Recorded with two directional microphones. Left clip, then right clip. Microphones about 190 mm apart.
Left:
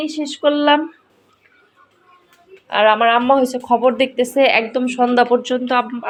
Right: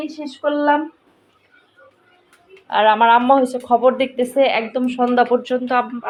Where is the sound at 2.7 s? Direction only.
Centre (ahead or behind).